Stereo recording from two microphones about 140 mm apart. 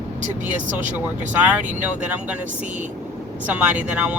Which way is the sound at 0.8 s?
10° right (ahead or behind).